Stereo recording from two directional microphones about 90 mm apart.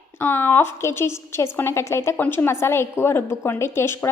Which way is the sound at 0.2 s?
25° left (ahead or behind).